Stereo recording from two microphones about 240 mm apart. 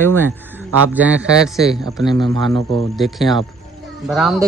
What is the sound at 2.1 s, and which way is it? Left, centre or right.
Speech, centre.